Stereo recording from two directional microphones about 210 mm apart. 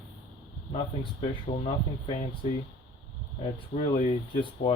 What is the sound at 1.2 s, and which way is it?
Speech, 30° left (ahead or behind).